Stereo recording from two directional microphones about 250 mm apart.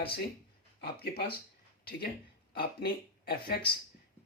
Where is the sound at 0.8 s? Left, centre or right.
Left.